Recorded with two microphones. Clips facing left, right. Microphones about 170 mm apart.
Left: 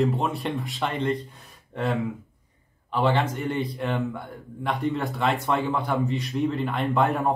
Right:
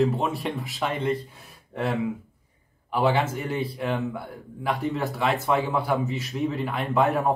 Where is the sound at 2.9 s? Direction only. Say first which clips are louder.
Even; 10° right (ahead or behind).